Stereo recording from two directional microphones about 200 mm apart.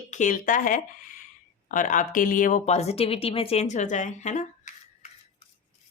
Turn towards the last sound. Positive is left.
turn(degrees=35)  # may be behind; listen again after turning